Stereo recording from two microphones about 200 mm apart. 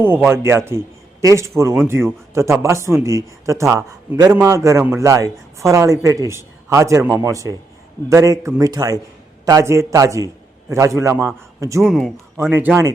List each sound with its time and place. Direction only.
0.0 s speech: 10° right (ahead or behind)
11.8 s speech: centre (ahead or behind)